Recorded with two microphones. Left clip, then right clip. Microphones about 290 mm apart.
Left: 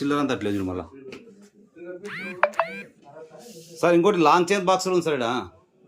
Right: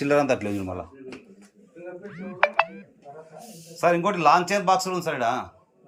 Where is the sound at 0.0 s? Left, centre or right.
Centre.